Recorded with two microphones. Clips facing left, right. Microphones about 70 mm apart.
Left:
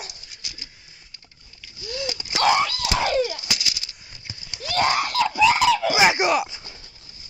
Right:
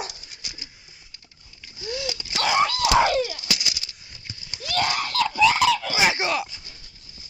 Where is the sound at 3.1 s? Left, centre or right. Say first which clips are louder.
Left 2 dB; left.